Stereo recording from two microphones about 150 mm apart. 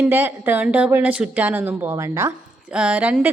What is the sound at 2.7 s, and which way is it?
Speech, 10° right (ahead or behind).